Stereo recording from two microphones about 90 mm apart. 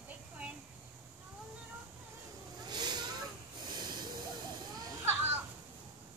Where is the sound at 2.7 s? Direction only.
50° right (ahead or behind).